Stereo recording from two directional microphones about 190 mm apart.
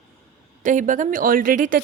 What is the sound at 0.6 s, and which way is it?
A woman's voice, 40° right (ahead or behind).